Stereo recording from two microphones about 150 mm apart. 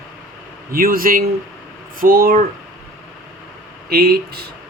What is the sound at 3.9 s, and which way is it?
Speech, 90° right.